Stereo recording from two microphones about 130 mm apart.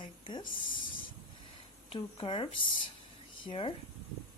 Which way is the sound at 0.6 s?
40° left (ahead or behind).